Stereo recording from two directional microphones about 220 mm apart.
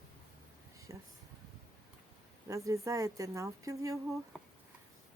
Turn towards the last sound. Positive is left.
turn(degrees=-15)  # may be behind; listen again after turning